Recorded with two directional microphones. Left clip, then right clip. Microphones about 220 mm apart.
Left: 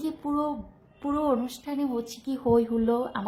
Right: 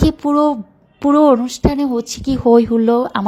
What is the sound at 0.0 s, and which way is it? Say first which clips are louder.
Speech: right 15 dB; 35° right (ahead or behind).